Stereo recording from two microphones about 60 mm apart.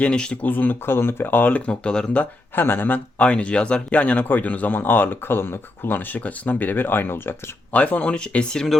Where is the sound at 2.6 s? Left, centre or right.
Left.